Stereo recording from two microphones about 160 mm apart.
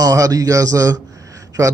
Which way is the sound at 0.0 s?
20° right (ahead or behind).